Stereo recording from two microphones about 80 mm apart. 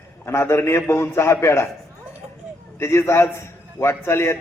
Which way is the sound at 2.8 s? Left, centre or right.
Left.